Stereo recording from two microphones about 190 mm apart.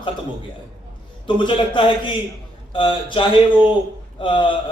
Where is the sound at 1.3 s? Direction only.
25° left (ahead or behind).